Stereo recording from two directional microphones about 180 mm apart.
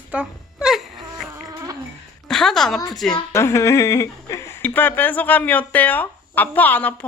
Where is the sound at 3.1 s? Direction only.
15° left (ahead or behind).